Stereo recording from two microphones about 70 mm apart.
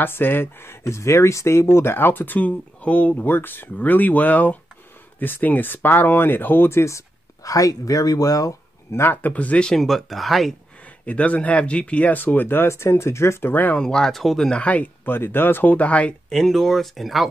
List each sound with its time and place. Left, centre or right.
0.0 s speech: left
9.0 s speech: left
9.3 s speech: centre
9.7 s speech: centre
11.1 s speech: centre
13.7 s speech: centre
14.6 s speech: centre
15.0 s speech: left; by 17.3 s centre